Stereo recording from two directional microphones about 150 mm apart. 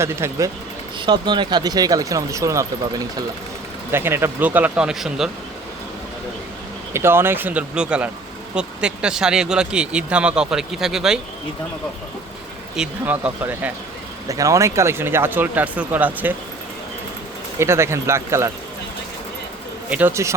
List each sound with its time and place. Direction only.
0.0 s speech: 20° right (ahead or behind)
0.9 s speech: 30° right (ahead or behind)
3.9 s speech: 15° right (ahead or behind)
6.9 s speech: 15° right (ahead or behind)
12.7 s speech: 5° right (ahead or behind)
14.3 s speech: 20° right (ahead or behind)
17.6 s speech: 20° right (ahead or behind)
19.9 s speech: 10° right (ahead or behind)